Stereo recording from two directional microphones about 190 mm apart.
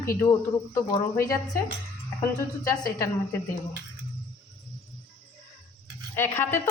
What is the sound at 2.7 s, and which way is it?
Speech, 20° left (ahead or behind).